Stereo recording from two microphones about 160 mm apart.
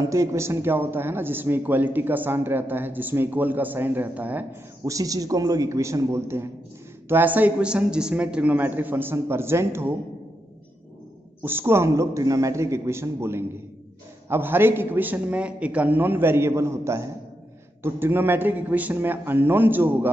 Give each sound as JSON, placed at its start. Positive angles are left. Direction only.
{"t": 0.0, "sound": "a man's voice", "side_deg": -20}
{"t": 11.4, "sound": "a man's voice", "side_deg": -15}